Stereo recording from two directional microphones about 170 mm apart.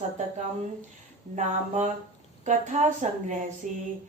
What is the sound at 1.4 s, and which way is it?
A woman's voice, 45° right (ahead or behind).